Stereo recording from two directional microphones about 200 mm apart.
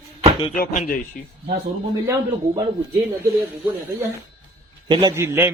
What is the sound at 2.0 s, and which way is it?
Speech, 15° right (ahead or behind).